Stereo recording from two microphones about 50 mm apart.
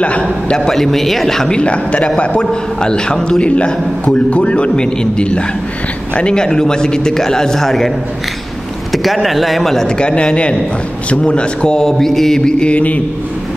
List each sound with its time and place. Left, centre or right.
0.0 s a man's voice: left
1.6 s a man's voice: left
8.9 s speech: centre
9.8 s a man's voice: centre
12.7 s a man's voice: left